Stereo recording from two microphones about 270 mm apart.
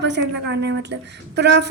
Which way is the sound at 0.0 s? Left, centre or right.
Right.